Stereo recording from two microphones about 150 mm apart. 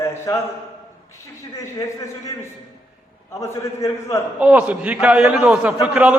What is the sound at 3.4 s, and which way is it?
Speech, 20° left (ahead or behind).